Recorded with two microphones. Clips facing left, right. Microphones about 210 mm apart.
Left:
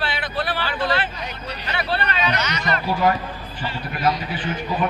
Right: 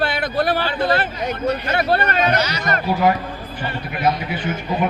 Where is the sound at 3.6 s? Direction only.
55° right (ahead or behind).